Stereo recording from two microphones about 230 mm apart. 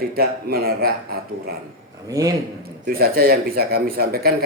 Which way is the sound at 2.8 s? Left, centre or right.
Right.